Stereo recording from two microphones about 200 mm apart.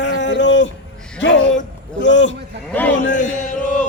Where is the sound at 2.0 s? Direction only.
65° left (ahead or behind).